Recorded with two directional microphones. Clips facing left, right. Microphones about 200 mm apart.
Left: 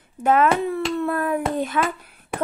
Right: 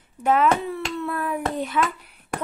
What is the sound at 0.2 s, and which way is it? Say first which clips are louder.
A child's voice: left 2 dB; 50° left (ahead or behind).